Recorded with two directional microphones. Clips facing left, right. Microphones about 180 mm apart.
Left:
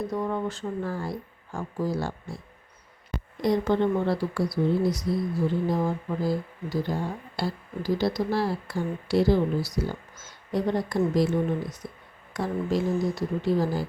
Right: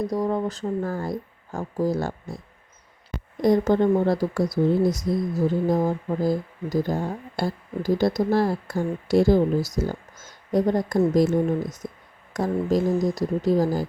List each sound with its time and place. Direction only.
0.1 s speech: 35° right (ahead or behind)
3.4 s speech: 45° right (ahead or behind)